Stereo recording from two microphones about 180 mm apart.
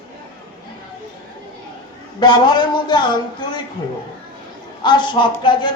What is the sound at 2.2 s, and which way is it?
Speech, 25° left (ahead or behind).